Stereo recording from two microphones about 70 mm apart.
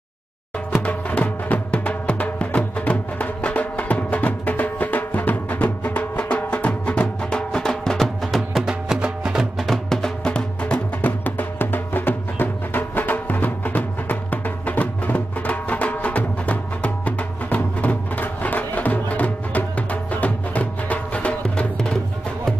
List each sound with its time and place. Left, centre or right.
0.8 s music: left; by 9.5 s centre
9.6 s music: centre